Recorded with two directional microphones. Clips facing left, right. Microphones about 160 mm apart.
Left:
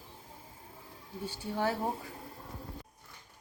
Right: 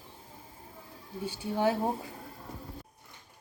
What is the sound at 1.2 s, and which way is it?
Speech, 15° right (ahead or behind).